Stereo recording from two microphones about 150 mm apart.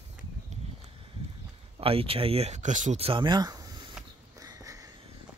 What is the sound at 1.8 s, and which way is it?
Speech, 40° right (ahead or behind).